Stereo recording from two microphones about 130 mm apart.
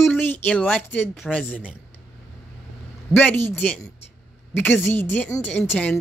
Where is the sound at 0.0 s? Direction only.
15° left (ahead or behind).